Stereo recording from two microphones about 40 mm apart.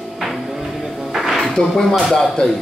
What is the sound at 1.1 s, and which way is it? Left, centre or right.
Music, centre.